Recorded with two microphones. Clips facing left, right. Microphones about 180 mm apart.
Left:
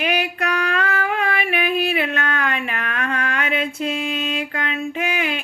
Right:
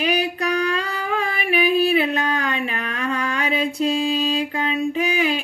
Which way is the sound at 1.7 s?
35° right (ahead or behind).